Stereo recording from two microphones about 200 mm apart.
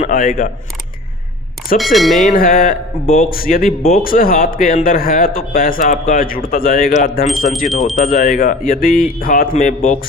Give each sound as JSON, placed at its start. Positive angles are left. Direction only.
{"t": 0.0, "sound": "speech", "side_deg": 45}
{"t": 1.8, "sound": "speech", "side_deg": 0}
{"t": 2.3, "sound": "speech", "side_deg": 45}
{"t": 7.7, "sound": "speech", "side_deg": 0}
{"t": 8.0, "sound": "speech", "side_deg": 45}